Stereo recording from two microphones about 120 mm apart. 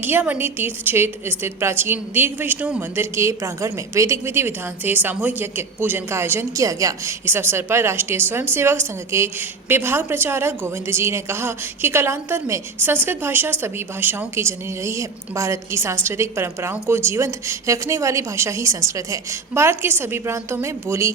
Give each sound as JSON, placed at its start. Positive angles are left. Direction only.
{"t": 0.0, "sound": "a woman's voice", "side_deg": -15}